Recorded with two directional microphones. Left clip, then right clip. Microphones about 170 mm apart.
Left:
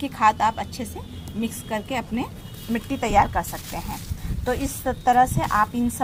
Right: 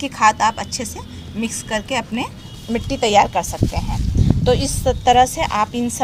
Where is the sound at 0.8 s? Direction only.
10° right (ahead or behind).